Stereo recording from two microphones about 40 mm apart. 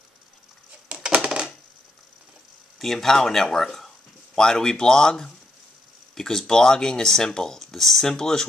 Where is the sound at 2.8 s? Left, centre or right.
Centre.